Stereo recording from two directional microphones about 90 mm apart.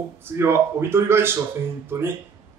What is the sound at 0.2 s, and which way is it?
Speech, 25° right (ahead or behind).